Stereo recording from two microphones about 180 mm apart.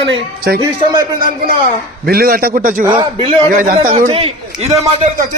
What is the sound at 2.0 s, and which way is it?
Speech, 55° right (ahead or behind).